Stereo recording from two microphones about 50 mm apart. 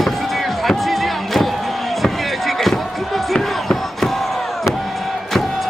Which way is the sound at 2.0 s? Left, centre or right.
Centre.